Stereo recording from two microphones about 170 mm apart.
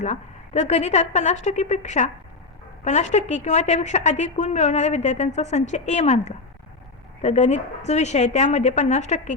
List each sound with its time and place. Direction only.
0.0 s a woman's voice: 40° left (ahead or behind)